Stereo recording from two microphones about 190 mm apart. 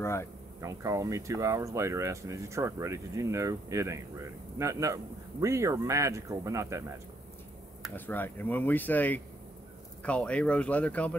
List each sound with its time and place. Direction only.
0.0 s speech: 15° left (ahead or behind)
0.6 s speech: 15° right (ahead or behind)
7.9 s speech: 10° left (ahead or behind)